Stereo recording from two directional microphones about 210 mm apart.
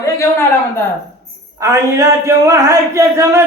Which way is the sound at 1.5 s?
15° right (ahead or behind).